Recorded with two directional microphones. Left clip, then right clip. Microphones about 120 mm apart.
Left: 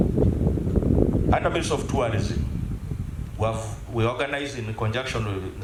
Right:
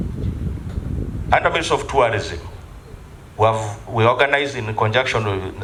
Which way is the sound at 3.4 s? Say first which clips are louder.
Right 10 dB; 40° right (ahead or behind).